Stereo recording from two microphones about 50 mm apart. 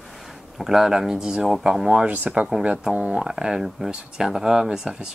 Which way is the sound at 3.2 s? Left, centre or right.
Centre.